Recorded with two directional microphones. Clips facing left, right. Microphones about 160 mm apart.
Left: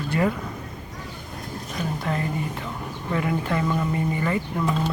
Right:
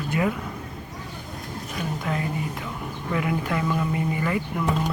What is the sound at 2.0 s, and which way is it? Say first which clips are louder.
Speech: left 1 dB; 5° right (ahead or behind).